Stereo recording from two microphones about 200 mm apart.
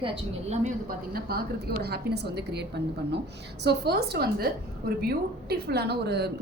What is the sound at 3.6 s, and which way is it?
A woman's voice, 55° right (ahead or behind).